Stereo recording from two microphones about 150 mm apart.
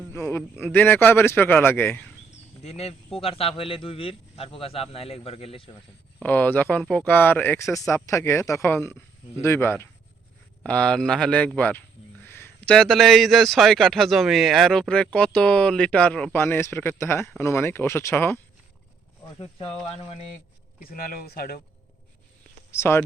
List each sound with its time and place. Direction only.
0.1 s a man's voice: 15° left (ahead or behind)
2.6 s a man's voice: 45° left (ahead or behind)
6.1 s speech: 10° left (ahead or behind)
12.2 s a sound: 15° left (ahead or behind)
12.7 s speech: 5° left (ahead or behind)
19.4 s a man's voice: 40° left (ahead or behind)
20.8 s speech: 75° left (ahead or behind)
22.7 s speech: 15° left (ahead or behind)